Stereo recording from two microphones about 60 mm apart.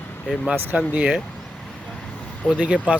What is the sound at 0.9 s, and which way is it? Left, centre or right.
Speech, centre.